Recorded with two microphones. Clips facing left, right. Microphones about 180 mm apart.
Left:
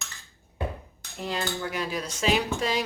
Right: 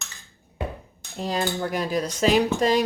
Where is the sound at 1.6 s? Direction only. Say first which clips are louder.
Right 6 dB; 40° right (ahead or behind).